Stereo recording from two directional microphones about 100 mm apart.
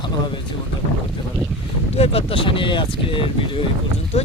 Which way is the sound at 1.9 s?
80° left.